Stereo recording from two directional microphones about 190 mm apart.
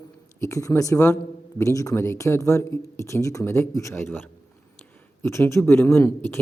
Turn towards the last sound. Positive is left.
turn(degrees=10)  # may be behind; listen again after turning